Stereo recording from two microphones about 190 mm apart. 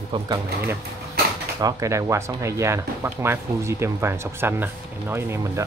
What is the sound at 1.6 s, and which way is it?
Speech, 20° right (ahead or behind).